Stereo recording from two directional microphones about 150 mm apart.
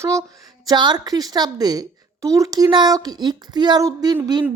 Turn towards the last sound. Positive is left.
turn(degrees=-30)  # may be behind; listen again after turning